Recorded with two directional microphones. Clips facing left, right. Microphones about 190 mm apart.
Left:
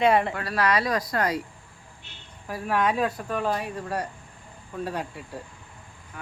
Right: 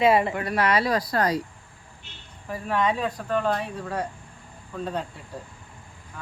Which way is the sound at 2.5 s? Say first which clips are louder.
Even; 5° left (ahead or behind).